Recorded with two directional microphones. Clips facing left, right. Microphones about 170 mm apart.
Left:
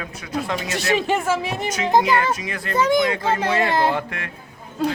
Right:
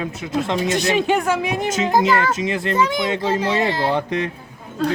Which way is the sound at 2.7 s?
45° left (ahead or behind).